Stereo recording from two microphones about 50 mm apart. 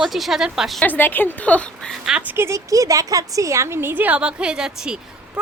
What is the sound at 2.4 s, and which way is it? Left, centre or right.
A woman's voice, right.